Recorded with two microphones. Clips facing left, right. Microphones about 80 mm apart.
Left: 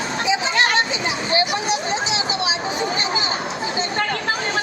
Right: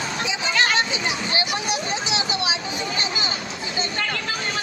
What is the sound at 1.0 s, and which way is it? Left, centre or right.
Vehicle, left.